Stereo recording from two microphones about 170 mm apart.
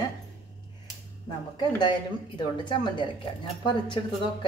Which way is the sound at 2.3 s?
25° left (ahead or behind).